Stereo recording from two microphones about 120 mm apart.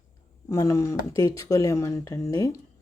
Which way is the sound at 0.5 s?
25° left (ahead or behind).